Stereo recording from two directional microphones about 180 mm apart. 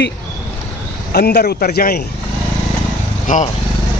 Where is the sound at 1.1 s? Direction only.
60° left (ahead or behind).